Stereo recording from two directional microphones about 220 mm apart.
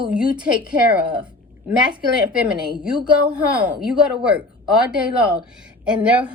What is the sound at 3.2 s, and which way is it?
A woman's voice, 5° right (ahead or behind).